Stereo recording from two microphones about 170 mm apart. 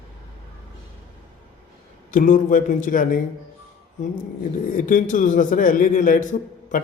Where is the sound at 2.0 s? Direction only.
50° left (ahead or behind).